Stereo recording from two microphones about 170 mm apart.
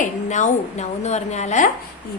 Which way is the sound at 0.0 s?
45° left (ahead or behind).